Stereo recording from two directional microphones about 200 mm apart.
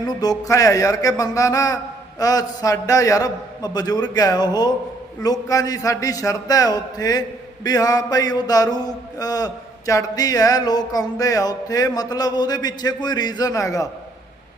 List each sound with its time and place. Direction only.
0.1 s a man's voice: 20° left (ahead or behind)